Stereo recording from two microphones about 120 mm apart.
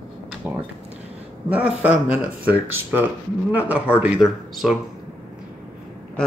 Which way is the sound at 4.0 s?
5° right (ahead or behind).